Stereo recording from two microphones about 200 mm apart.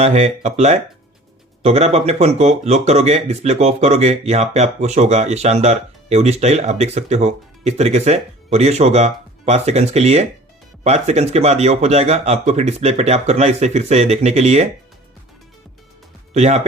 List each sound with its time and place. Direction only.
0.0 s speech: 35° right (ahead or behind)
16.3 s speech: 35° right (ahead or behind)